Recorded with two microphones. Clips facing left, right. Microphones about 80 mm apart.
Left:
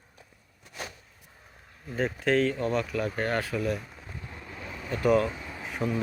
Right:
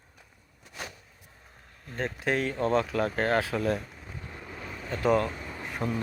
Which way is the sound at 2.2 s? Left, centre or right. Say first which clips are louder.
Left 4 dB; centre.